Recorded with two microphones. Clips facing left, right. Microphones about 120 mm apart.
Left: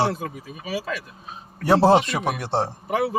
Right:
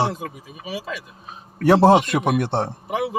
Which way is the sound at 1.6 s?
50° right (ahead or behind).